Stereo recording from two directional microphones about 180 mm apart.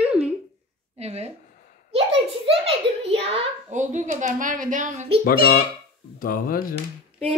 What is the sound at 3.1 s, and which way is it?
A child's voice, 35° right (ahead or behind).